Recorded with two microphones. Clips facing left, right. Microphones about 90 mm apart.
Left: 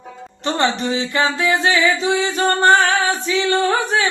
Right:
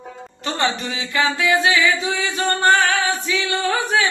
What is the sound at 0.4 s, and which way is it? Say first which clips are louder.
Music: left 4 dB; 30° left (ahead or behind).